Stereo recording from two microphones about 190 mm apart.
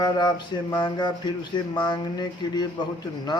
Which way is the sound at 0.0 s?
20° left (ahead or behind).